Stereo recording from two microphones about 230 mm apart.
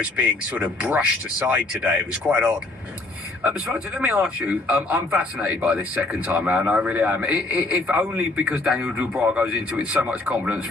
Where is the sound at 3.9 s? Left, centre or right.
Centre.